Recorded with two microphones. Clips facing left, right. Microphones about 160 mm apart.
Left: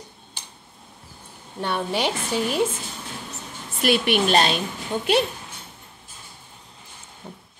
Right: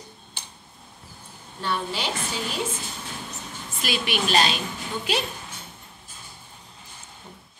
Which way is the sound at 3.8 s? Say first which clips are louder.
Left 7 dB; 60° left (ahead or behind).